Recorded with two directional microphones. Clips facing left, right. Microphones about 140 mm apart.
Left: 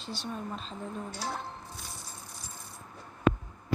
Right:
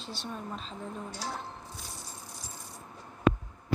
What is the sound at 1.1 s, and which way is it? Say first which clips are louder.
Speech: left 2 dB; 60° left (ahead or behind).